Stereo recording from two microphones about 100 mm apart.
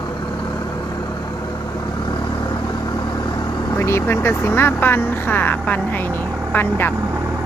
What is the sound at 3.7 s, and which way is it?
Speech, 25° left (ahead or behind).